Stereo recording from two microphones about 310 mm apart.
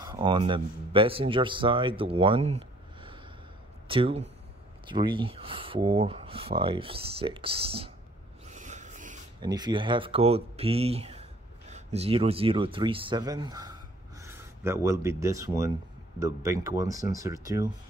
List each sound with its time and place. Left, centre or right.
0.0 s speech: centre
8.5 s a sound: right
9.4 s speech: centre